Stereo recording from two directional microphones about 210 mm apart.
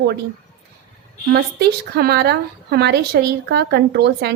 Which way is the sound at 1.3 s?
50° right (ahead or behind).